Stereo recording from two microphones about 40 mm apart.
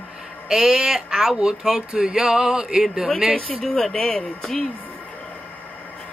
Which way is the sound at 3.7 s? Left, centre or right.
Left.